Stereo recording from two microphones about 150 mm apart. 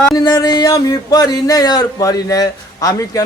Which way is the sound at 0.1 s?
25° left (ahead or behind).